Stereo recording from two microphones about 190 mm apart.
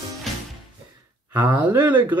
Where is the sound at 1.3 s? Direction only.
15° right (ahead or behind).